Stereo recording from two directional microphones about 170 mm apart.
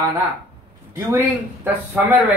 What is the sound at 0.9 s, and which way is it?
Speech, 10° right (ahead or behind).